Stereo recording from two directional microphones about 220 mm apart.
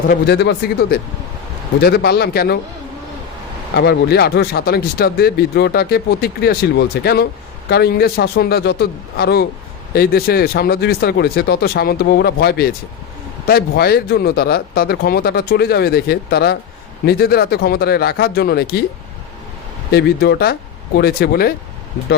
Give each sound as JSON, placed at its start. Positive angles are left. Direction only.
{"t": 0.1, "sound": "speech", "side_deg": 50}
{"t": 3.8, "sound": "speech", "side_deg": 50}
{"t": 19.9, "sound": "speech", "side_deg": 45}